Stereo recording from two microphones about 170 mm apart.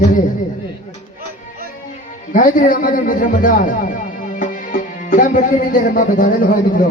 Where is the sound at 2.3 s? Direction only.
50° left (ahead or behind).